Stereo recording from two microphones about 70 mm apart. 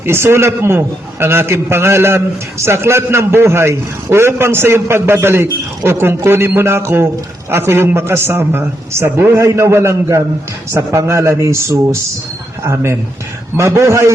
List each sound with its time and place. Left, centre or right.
0.0 s a man's voice: right
9.4 s a man's voice: right